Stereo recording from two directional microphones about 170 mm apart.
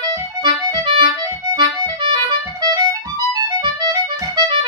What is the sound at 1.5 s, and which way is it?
Music, 30° right (ahead or behind).